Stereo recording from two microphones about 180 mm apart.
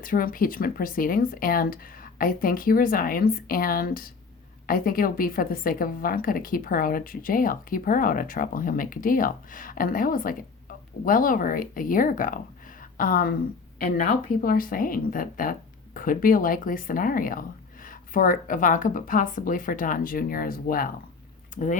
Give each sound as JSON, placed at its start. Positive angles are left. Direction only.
{"t": 0.0, "sound": "a woman's voice", "side_deg": 50}